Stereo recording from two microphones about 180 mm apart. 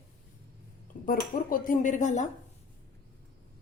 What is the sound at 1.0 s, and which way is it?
Speech, 50° left (ahead or behind).